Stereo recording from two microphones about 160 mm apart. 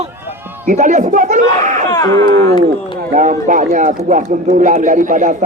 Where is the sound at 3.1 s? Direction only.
55° right (ahead or behind).